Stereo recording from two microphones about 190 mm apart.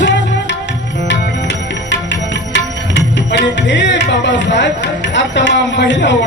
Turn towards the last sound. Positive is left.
turn(degrees=65)  # may be behind; listen again after turning